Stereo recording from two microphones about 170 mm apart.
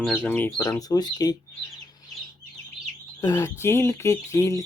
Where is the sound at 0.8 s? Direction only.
20° left (ahead or behind).